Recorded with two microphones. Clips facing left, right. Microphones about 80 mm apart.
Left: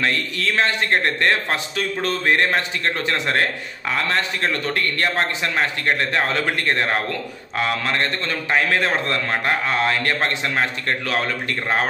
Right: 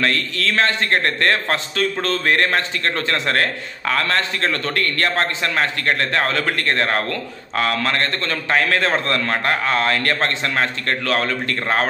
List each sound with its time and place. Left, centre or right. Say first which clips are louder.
0.0 s a man's voice: right 2 dB; centre